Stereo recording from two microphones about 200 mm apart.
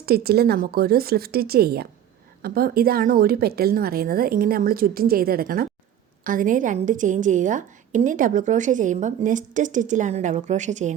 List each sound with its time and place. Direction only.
0.0 s a woman's voice: 50° right (ahead or behind)